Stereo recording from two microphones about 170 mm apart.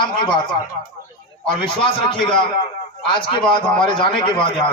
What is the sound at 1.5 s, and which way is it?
Speech, 30° left (ahead or behind).